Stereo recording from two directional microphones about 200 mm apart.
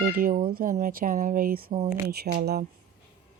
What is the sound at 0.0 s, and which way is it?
Speech, 45° right (ahead or behind).